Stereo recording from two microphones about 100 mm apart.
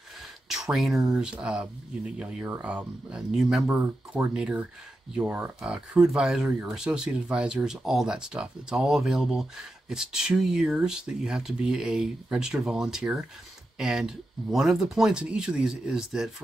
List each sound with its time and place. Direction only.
0.5 s speech: 5° right (ahead or behind)